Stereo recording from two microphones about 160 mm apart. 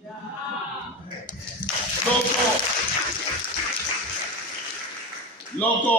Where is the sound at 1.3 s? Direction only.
55° left (ahead or behind).